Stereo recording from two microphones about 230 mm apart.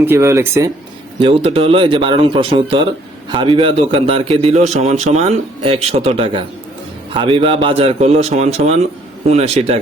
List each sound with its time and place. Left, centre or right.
0.0 s speech: centre
1.2 s a man's voice: right